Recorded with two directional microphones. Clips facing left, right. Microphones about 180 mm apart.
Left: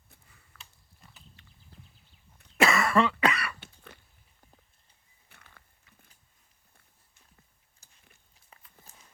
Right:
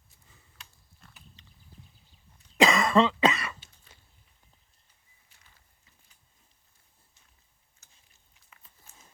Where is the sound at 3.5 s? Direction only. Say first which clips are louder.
Left 8 dB; 60° left (ahead or behind).